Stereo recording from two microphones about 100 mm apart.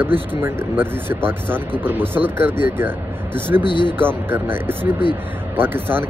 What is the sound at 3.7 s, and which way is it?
Speech, 55° left (ahead or behind).